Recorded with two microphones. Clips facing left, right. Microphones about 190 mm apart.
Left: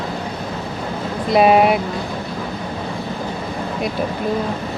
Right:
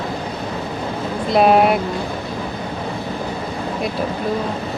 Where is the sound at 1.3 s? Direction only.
Centre (ahead or behind).